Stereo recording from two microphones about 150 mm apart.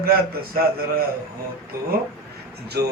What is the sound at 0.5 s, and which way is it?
Speech, 90° right.